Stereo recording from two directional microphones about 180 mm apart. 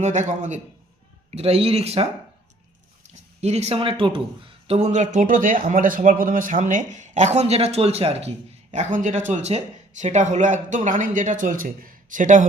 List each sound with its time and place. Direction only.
0.0 s speech: 40° right (ahead or behind)
3.4 s speech: 35° right (ahead or behind)